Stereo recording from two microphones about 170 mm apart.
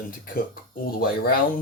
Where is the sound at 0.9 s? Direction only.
60° left (ahead or behind).